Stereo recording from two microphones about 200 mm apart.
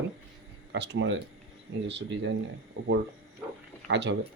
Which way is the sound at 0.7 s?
60° right (ahead or behind).